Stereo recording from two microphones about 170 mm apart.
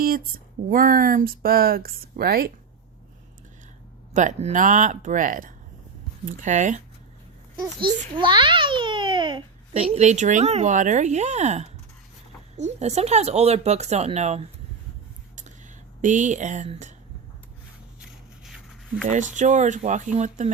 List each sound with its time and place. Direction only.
0.0 s a sound: 60° right (ahead or behind)
0.7 s speech: 55° right (ahead or behind)
4.1 s speech: 45° right (ahead or behind)
7.6 s a child's voice: 25° right (ahead or behind)
16.0 s speech: 45° right (ahead or behind)
18.4 s a sound: centre (ahead or behind)
19.0 s speech: 45° right (ahead or behind)